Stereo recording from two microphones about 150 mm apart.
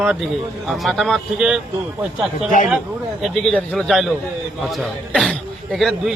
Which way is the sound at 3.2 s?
Centre (ahead or behind).